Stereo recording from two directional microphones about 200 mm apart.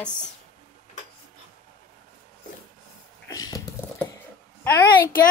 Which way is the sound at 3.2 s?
20° left (ahead or behind).